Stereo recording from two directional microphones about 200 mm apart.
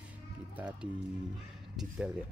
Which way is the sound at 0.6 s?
5° right (ahead or behind).